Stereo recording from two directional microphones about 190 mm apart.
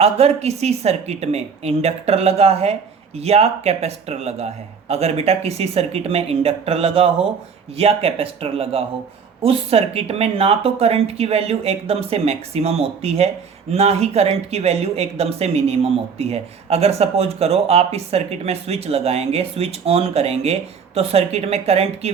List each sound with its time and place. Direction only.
0.0 s speech: 35° right (ahead or behind)